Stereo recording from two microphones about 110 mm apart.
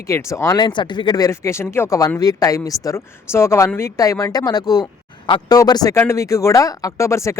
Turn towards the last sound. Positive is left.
turn(degrees=25)  # may be behind; listen again after turning